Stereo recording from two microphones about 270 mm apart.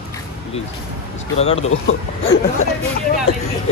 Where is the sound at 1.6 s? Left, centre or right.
Left.